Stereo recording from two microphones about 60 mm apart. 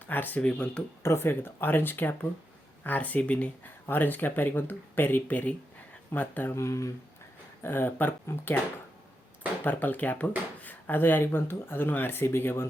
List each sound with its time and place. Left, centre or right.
0.1 s speech: left
0.5 s speech: centre
1.0 s speech: left
6.5 s speech: left
7.6 s speech: left
9.6 s speech: left